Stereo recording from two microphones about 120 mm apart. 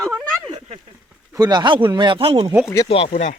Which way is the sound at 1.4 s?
35° right (ahead or behind).